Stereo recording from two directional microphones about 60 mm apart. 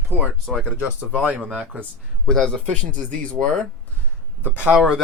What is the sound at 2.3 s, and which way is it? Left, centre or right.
Speech, centre.